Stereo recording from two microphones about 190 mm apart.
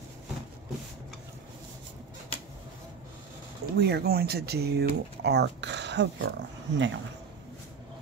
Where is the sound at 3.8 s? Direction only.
60° right (ahead or behind).